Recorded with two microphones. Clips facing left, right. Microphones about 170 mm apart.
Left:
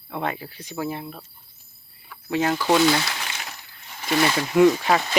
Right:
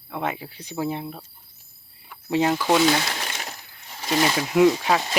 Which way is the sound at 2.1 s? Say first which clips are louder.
Right 2 dB; 15° right (ahead or behind).